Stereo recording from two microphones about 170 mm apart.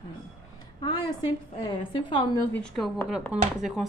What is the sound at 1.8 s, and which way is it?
Speech, 30° left (ahead or behind).